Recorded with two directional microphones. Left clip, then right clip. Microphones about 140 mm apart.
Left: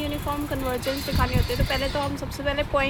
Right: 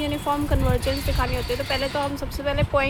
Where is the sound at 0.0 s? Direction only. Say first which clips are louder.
Right 4 dB; 30° right (ahead or behind).